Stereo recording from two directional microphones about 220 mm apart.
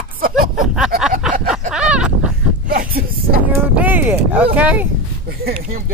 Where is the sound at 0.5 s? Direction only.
Centre (ahead or behind).